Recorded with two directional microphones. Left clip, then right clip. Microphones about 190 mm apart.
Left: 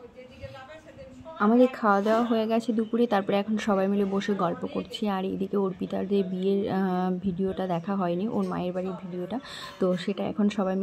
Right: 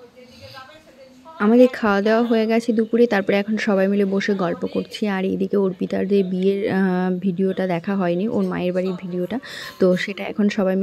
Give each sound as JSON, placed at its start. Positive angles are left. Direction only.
{"t": 1.4, "sound": "speech", "side_deg": -35}